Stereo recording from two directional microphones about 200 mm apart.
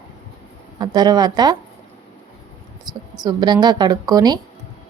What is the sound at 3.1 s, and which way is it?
A woman's voice, 20° right (ahead or behind).